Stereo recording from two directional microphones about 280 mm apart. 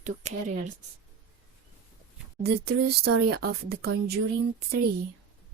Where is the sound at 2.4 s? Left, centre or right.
Right.